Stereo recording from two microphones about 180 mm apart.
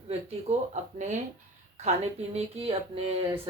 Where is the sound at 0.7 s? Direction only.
40° right (ahead or behind).